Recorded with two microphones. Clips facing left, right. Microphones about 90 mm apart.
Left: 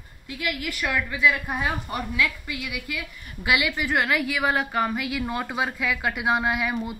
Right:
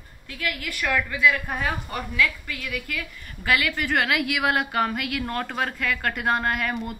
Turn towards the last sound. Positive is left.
turn(degrees=5)  # may be behind; listen again after turning